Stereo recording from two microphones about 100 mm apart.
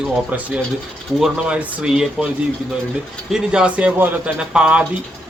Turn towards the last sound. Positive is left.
turn(degrees=-10)  # may be behind; listen again after turning